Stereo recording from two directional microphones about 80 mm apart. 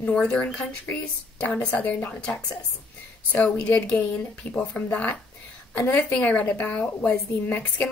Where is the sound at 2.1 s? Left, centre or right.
Centre; by 6.0 s left.